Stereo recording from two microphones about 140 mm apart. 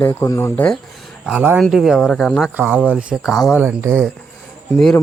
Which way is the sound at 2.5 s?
15° right (ahead or behind).